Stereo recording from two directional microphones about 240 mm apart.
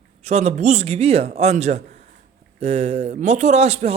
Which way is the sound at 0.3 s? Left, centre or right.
Right.